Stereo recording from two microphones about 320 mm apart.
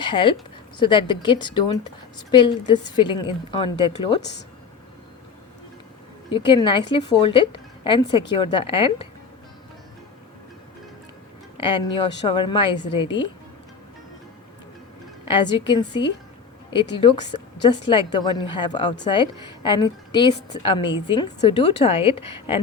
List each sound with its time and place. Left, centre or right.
0.0 s a woman's voice: centre
6.3 s a woman's voice: centre
11.5 s a woman's voice: centre
15.3 s a woman's voice: centre